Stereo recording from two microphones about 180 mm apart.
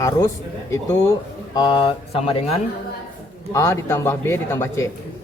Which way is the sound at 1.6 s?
25° left (ahead or behind).